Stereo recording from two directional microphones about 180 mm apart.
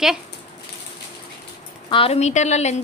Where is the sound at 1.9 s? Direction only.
35° left (ahead or behind).